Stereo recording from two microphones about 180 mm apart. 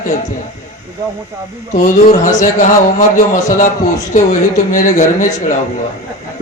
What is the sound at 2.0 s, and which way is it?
Speech, 45° left (ahead or behind).